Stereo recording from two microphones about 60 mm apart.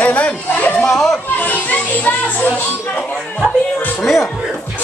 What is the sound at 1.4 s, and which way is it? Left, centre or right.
A child's voice, left.